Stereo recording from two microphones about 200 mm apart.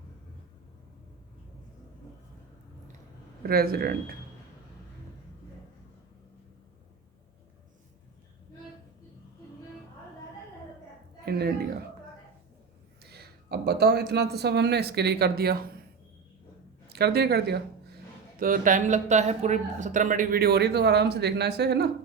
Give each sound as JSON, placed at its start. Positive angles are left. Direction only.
{"t": 3.4, "sound": "speech", "side_deg": -50}
{"t": 11.3, "sound": "a woman's voice", "side_deg": -50}
{"t": 13.0, "sound": "a man's voice", "side_deg": -55}
{"t": 16.9, "sound": "speech", "side_deg": -55}